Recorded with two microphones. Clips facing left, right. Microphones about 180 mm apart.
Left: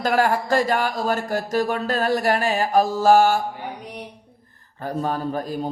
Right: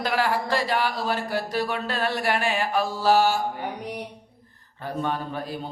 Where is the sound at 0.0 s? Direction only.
45° left (ahead or behind).